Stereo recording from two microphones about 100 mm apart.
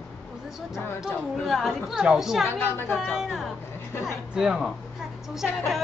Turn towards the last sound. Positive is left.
turn(degrees=0)  # may be behind; listen again after turning